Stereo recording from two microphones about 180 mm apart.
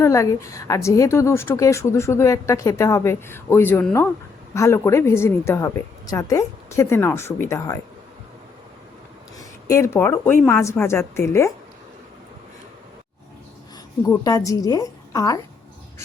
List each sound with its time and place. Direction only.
0.0 s a woman's voice: 15° left (ahead or behind)
9.4 s a woman's voice: 15° left (ahead or behind)
14.1 s a woman's voice: 20° left (ahead or behind)